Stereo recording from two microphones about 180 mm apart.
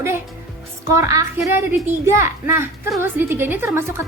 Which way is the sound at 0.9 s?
15° right (ahead or behind).